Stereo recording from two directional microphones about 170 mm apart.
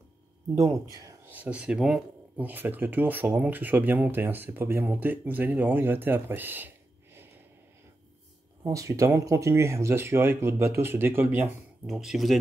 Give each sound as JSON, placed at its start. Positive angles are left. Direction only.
{"t": 0.9, "sound": "speech", "side_deg": -15}
{"t": 8.6, "sound": "speech", "side_deg": -20}